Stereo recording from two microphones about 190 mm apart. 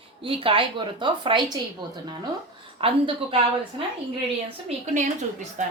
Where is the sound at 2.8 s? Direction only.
30° right (ahead or behind).